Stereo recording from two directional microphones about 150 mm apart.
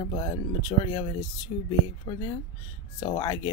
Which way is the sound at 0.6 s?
35° left (ahead or behind).